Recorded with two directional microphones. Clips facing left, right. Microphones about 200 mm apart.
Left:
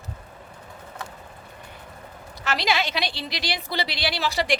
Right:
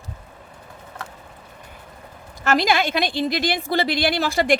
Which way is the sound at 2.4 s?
50° right (ahead or behind).